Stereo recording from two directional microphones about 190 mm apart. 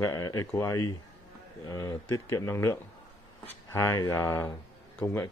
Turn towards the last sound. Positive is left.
turn(degrees=10)  # may be behind; listen again after turning